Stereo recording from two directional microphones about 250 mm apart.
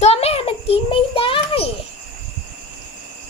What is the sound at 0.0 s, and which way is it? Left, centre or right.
Child singing, left.